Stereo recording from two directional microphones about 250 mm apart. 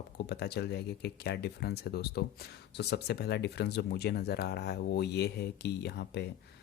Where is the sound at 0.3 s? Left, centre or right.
Left.